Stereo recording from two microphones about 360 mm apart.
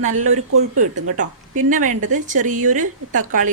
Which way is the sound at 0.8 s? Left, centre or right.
Right.